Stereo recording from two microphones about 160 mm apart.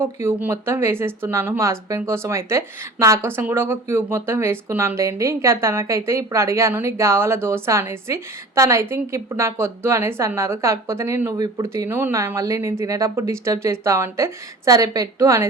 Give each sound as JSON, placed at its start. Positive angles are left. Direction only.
{"t": 0.0, "sound": "speech", "side_deg": -15}